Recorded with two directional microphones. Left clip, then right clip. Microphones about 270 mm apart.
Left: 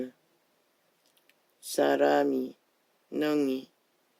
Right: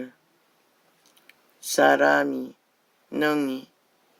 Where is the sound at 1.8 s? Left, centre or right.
Right.